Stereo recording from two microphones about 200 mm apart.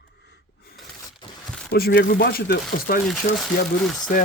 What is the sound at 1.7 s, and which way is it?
Speech, 50° left (ahead or behind).